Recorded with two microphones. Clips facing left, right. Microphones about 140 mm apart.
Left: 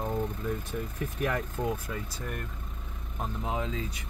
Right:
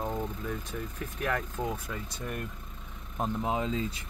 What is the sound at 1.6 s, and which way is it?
Speech, 10° right (ahead or behind).